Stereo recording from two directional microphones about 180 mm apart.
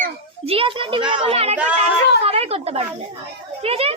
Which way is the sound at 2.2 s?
35° right (ahead or behind).